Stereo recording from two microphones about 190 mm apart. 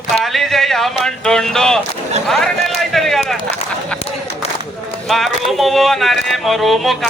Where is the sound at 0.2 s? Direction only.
Centre (ahead or behind).